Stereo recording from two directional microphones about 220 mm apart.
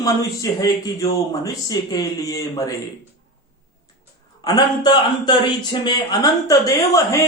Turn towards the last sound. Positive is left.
turn(degrees=15)  # may be behind; listen again after turning